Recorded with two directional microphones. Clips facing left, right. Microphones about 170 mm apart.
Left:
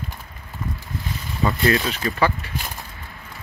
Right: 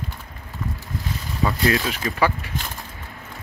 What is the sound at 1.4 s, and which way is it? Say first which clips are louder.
Speech: left 1 dB; centre (ahead or behind).